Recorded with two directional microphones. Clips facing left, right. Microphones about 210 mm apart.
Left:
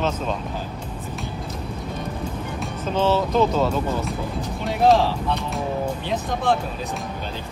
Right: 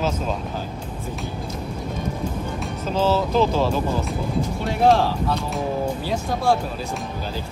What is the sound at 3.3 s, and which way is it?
Speech, 30° right (ahead or behind).